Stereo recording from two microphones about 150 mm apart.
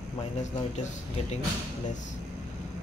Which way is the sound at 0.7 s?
50° left (ahead or behind).